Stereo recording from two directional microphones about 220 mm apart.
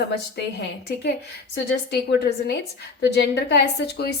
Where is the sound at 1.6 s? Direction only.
50° left (ahead or behind).